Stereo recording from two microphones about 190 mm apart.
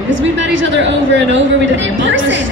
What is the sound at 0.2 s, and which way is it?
A woman's voice, 75° right (ahead or behind).